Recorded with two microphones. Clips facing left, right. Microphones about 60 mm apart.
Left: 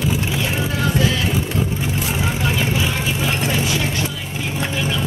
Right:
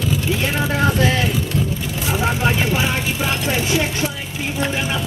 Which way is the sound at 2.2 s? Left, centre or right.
Right.